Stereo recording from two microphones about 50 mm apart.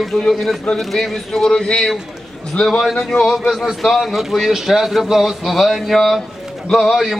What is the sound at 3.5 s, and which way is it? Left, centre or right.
A man's voice, centre.